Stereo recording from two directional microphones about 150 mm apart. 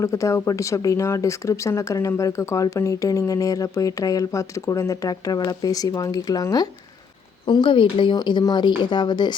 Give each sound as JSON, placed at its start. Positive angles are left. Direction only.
{"t": 0.0, "sound": "speech", "side_deg": 20}